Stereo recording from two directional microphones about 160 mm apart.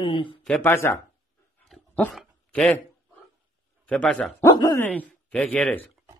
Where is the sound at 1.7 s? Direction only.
5° left (ahead or behind).